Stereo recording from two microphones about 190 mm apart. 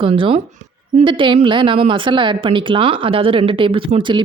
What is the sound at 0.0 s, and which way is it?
A woman's voice, 30° right (ahead or behind).